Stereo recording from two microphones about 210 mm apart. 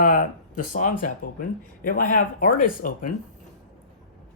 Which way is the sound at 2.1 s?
40° left (ahead or behind).